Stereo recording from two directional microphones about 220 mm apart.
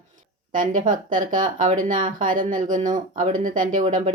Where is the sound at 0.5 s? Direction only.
35° right (ahead or behind).